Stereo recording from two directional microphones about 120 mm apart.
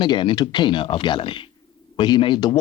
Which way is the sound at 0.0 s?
40° left (ahead or behind).